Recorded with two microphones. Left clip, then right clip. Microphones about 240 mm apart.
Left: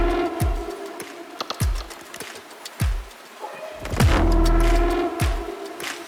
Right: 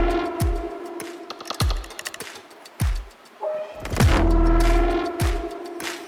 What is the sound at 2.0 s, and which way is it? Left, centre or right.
Music, centre.